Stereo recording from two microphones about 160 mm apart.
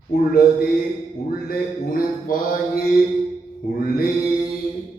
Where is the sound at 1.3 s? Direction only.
65° left (ahead or behind).